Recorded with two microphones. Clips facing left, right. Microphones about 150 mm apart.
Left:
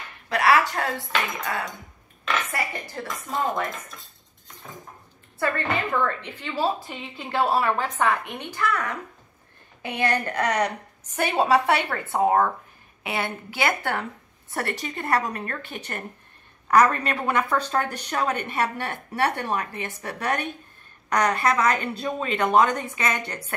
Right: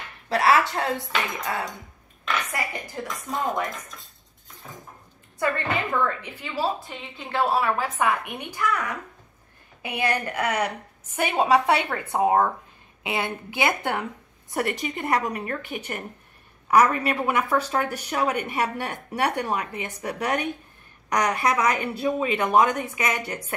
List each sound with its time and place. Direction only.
0.3 s a woman's voice: 30° right (ahead or behind)
2.5 s a woman's voice: 15° right (ahead or behind)
3.3 s speech: centre (ahead or behind)
6.0 s a woman's voice: 10° right (ahead or behind)